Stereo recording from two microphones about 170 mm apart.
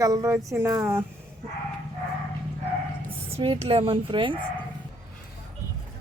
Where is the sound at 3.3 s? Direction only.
30° right (ahead or behind).